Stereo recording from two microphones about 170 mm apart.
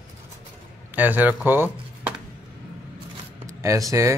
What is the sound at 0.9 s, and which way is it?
Speech, 10° right (ahead or behind).